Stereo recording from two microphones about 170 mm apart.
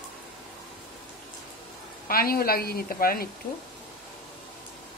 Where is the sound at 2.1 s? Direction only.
60° left (ahead or behind).